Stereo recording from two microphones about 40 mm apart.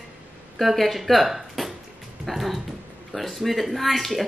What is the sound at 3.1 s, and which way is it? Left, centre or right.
A child's voice, centre.